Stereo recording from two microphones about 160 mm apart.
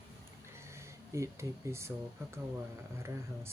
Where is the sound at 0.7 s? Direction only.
15° right (ahead or behind).